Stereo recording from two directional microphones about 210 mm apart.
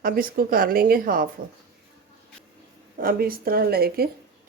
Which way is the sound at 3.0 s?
45° right (ahead or behind).